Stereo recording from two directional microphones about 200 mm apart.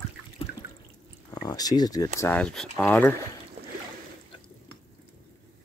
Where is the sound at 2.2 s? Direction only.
5° left (ahead or behind).